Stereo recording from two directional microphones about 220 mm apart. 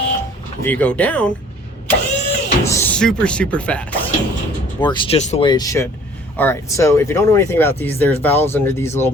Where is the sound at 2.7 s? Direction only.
10° left (ahead or behind).